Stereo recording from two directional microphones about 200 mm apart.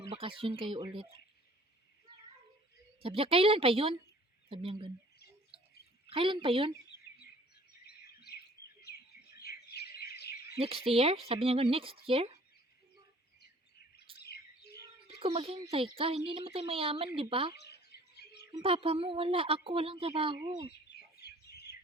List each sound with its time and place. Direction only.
0.1 s a woman's voice: 25° right (ahead or behind)
3.0 s a woman's voice: 30° right (ahead or behind)
5.5 s a sound: 30° right (ahead or behind)
6.1 s a woman's voice: 25° right (ahead or behind)
6.8 s bird vocalization: 55° left (ahead or behind)
7.9 s bird: 50° left (ahead or behind)
9.4 s bird: 55° left (ahead or behind)
10.6 s a woman's voice: 30° right (ahead or behind)
14.2 s bird: 55° left (ahead or behind)
15.2 s a woman's voice: 30° right (ahead or behind)
18.5 s a woman's voice: 30° right (ahead or behind)
21.2 s bird: 55° left (ahead or behind)